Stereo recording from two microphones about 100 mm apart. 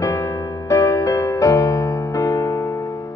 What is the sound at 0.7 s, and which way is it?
Music, 40° left (ahead or behind).